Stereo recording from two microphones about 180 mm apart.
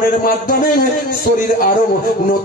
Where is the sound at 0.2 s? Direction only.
50° left (ahead or behind).